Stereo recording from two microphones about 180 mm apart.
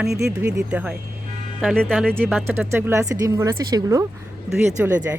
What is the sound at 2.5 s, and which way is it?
Speech, 10° right (ahead or behind).